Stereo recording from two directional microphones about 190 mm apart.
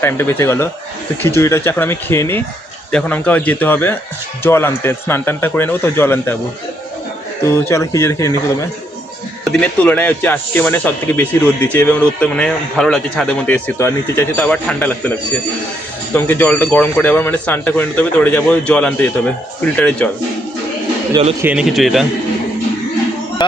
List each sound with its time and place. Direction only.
0.0 s speech: 10° left (ahead or behind)
7.4 s speech: 15° left (ahead or behind)
9.4 s speech: 5° left (ahead or behind)
13.7 s speech: 15° left (ahead or behind)
16.1 s speech: 10° left (ahead or behind)
21.4 s a man's voice: 5° right (ahead or behind)
23.4 s speech: 25° left (ahead or behind)